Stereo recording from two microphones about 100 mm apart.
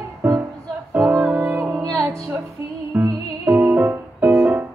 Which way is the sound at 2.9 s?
20° right (ahead or behind).